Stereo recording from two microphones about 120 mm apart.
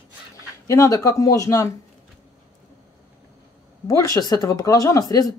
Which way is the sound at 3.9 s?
30° left (ahead or behind).